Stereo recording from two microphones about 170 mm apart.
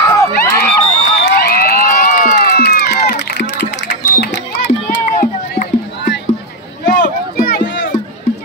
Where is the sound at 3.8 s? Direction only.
85° left.